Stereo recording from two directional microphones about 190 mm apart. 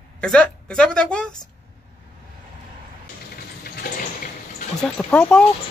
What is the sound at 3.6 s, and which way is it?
Water, 50° left (ahead or behind).